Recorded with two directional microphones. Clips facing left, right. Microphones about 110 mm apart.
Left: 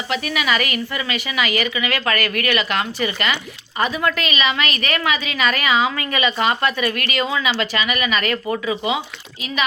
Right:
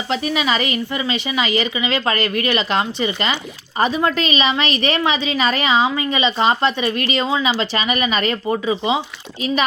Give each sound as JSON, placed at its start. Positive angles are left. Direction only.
{"t": 0.1, "sound": "a woman's voice", "side_deg": -25}